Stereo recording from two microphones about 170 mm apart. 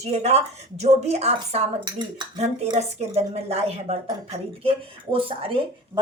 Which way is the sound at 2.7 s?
40° right (ahead or behind).